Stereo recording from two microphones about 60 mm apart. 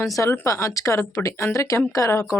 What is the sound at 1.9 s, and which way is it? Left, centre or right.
Speech, left.